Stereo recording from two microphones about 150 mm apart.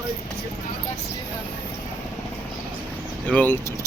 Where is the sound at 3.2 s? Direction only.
10° left (ahead or behind).